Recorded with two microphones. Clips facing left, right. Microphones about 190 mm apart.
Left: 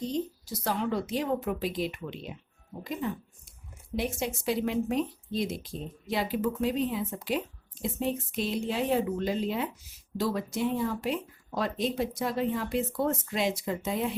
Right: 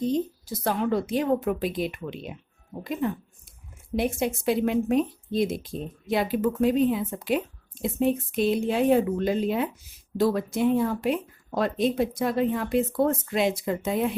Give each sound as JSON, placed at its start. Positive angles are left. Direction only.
{"t": 0.0, "sound": "a woman's voice", "side_deg": -55}